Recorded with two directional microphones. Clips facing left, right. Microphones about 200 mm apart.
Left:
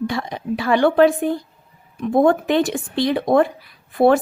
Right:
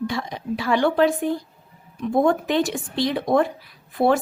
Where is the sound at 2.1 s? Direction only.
55° left (ahead or behind).